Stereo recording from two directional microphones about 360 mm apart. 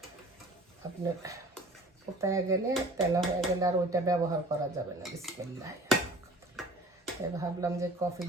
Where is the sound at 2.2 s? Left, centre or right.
Centre.